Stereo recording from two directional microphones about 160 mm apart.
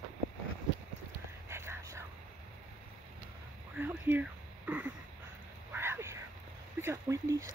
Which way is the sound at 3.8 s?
10° right (ahead or behind).